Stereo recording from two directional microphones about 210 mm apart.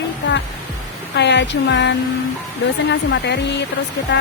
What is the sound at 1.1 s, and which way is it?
Speech, 55° left (ahead or behind).